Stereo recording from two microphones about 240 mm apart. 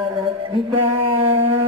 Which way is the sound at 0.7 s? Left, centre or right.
Right.